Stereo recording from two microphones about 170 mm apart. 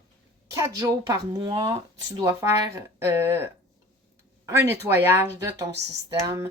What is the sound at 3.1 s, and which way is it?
Speech, 15° right (ahead or behind).